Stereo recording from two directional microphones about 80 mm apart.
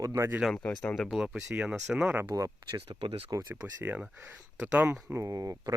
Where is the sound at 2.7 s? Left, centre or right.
Right.